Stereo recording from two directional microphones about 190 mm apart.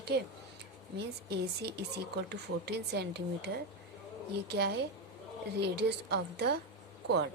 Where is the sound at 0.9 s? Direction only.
60° right (ahead or behind).